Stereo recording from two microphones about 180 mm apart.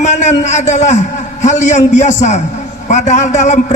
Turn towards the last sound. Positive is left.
turn(degrees=40)  # may be behind; listen again after turning